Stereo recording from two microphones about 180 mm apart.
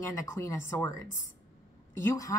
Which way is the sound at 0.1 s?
15° left (ahead or behind).